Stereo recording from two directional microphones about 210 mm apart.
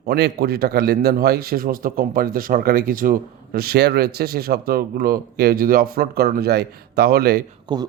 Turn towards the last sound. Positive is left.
turn(degrees=-20)  # may be behind; listen again after turning